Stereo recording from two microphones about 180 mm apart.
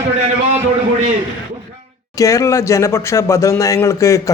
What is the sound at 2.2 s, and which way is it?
Speech, 15° left (ahead or behind).